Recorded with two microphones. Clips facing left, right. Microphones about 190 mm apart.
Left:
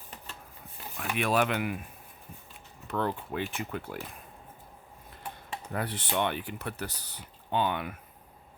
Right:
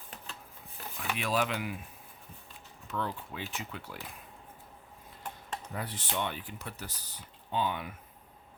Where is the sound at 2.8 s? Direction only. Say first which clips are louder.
Left 5 dB; 60° left (ahead or behind).